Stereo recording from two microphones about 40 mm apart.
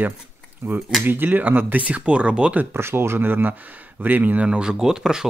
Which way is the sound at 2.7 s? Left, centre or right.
Right.